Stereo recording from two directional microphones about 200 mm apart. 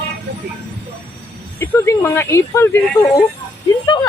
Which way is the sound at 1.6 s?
15° left (ahead or behind).